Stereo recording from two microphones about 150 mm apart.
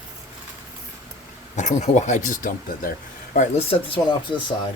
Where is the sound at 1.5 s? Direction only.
50° left (ahead or behind).